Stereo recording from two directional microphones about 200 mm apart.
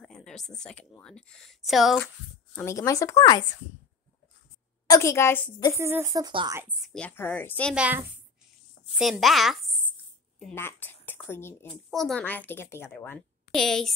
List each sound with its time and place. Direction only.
0.0 s a sound: 5° left (ahead or behind)
1.0 s speech: 5° left (ahead or behind)
2.5 s speech: 15° left (ahead or behind)
4.8 s a woman's voice: 15° left (ahead or behind)
5.8 s speech: 10° right (ahead or behind)
6.6 s speech: centre (ahead or behind)
7.7 s speech: 5° right (ahead or behind)
10.4 s a woman's voice: 10° left (ahead or behind)